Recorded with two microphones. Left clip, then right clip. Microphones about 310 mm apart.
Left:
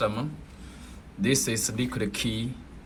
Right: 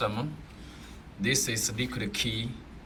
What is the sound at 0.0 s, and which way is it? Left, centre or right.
Speech, centre.